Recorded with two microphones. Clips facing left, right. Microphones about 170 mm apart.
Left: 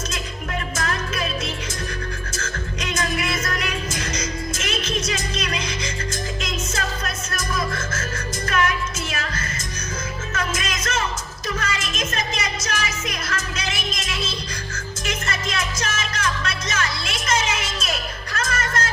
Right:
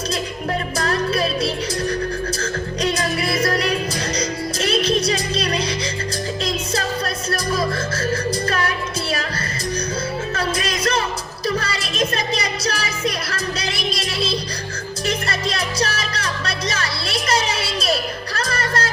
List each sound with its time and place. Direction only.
0.8 s music: 35° right (ahead or behind)
2.4 s music: 35° right (ahead or behind)
10.3 s music: 35° right (ahead or behind)